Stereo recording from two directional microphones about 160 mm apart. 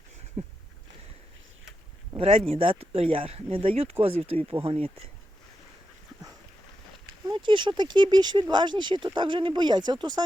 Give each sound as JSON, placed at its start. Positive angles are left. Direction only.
{"t": 2.1, "sound": "speech", "side_deg": -35}
{"t": 7.3, "sound": "speech", "side_deg": -30}